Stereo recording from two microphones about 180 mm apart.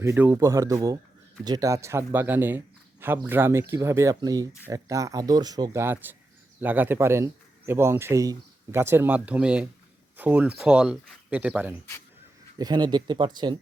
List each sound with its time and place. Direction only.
0.0 s a man's voice: 15° right (ahead or behind)
12.5 s speech: 25° right (ahead or behind)